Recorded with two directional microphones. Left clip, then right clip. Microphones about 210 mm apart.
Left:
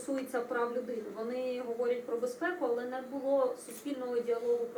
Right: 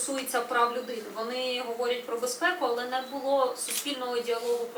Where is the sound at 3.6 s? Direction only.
5° left (ahead or behind).